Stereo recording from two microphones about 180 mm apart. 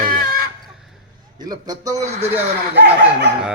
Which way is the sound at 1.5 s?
20° right (ahead or behind).